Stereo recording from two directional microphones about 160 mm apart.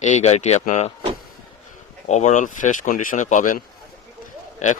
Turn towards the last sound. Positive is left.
turn(degrees=50)  # may be behind; listen again after turning